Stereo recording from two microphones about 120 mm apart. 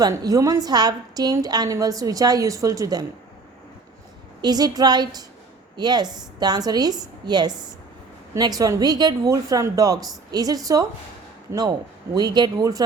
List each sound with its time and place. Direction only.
0.0 s a woman's voice: 30° right (ahead or behind)
4.4 s a woman's voice: 35° right (ahead or behind)
12.1 s a woman's voice: 35° right (ahead or behind)